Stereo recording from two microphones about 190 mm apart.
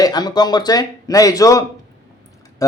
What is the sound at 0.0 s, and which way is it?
Speech, 20° left (ahead or behind).